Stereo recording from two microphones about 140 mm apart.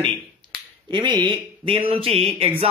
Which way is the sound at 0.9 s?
30° right (ahead or behind).